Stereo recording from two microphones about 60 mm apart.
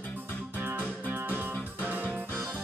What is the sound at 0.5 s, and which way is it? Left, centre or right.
Music, right.